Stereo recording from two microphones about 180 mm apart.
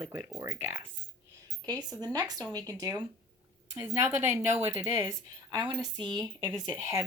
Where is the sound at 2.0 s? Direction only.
20° right (ahead or behind).